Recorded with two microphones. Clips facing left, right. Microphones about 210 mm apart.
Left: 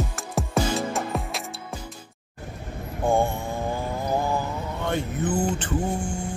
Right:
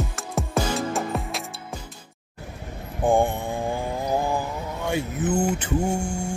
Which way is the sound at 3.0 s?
15° right (ahead or behind).